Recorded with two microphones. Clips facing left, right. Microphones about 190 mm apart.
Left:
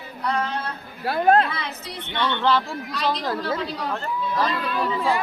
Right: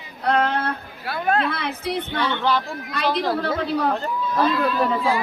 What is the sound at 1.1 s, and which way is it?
Speech, 40° left (ahead or behind).